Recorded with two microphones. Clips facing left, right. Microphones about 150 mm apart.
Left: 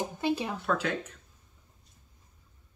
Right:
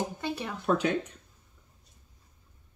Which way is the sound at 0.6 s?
20° right (ahead or behind).